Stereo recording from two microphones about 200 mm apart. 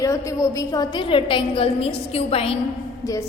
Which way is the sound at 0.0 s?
15° left (ahead or behind).